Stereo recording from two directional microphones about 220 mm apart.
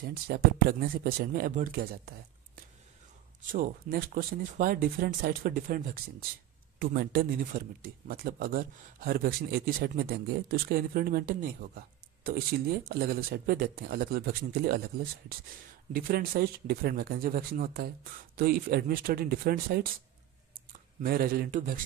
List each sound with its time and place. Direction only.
0.1 s speech: 45° right (ahead or behind)
6.8 s speech: 45° right (ahead or behind)
15.9 s speech: 40° right (ahead or behind)
21.0 s speech: 40° right (ahead or behind)